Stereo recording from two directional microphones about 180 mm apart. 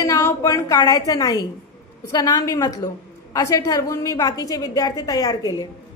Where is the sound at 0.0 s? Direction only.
15° left (ahead or behind).